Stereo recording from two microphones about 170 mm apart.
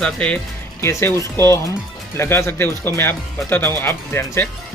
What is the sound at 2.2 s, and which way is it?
Speech, 15° left (ahead or behind).